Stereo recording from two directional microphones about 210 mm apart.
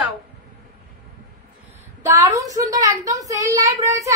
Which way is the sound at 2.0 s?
15° right (ahead or behind).